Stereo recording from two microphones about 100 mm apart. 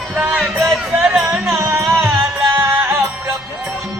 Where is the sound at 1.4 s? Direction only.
25° right (ahead or behind).